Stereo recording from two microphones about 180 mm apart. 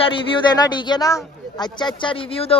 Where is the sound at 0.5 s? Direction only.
25° left (ahead or behind).